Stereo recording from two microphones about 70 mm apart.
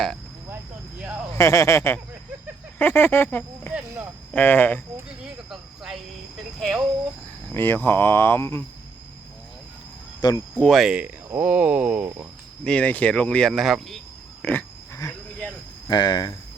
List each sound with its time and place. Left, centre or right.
1.4 s speech: left
2.7 s speech: left
5.0 s cricket: centre
7.5 s speech: left
10.2 s speech: left
10.7 s speech: centre
11.3 s speech: right
12.6 s speech: centre
13.5 s speech: centre
14.4 s pig: left
15.9 s speech: left